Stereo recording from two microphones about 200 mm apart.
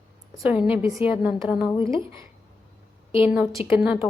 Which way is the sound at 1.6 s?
25° left (ahead or behind).